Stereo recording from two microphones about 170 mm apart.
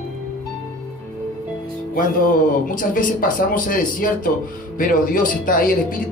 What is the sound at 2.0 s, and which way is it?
A man's voice, 55° left (ahead or behind).